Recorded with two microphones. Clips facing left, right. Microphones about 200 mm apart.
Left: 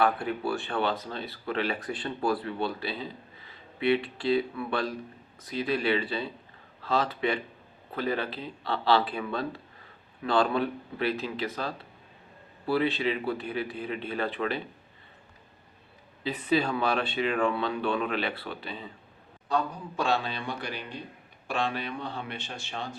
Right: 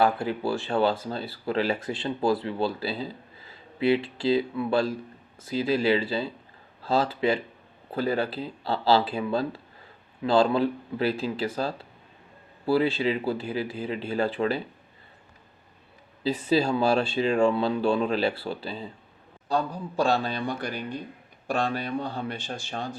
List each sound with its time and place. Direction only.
0.0 s speech: 30° right (ahead or behind)
16.2 s speech: 30° right (ahead or behind)